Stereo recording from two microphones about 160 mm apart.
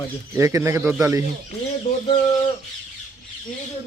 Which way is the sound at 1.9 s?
70° left (ahead or behind).